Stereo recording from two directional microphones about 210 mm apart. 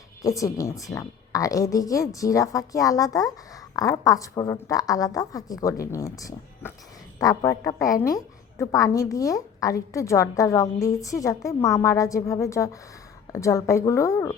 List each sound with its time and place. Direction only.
0.2 s a woman's voice: 15° left (ahead or behind)